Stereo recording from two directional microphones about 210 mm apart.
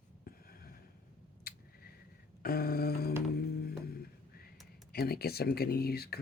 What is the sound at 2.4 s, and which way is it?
Music, 45° left (ahead or behind).